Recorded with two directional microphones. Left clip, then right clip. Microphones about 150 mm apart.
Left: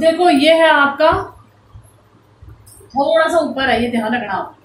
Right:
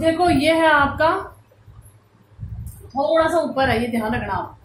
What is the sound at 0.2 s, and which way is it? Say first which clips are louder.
Speech: left 5 dB; 25° right (ahead or behind).